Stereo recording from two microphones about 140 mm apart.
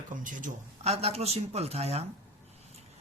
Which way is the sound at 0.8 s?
50° right (ahead or behind).